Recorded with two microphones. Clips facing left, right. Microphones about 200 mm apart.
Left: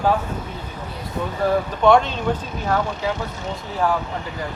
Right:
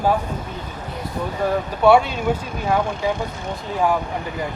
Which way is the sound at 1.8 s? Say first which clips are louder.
Right 2 dB; 10° right (ahead or behind).